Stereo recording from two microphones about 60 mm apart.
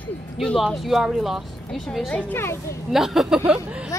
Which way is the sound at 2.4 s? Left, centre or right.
Left.